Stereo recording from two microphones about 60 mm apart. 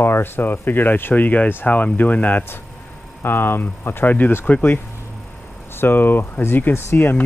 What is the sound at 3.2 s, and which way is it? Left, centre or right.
Speech, left.